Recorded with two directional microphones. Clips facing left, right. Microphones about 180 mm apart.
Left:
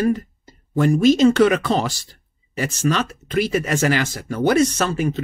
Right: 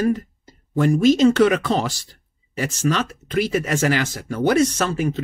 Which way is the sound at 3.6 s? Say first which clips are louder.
Left 1 dB; 35° left (ahead or behind).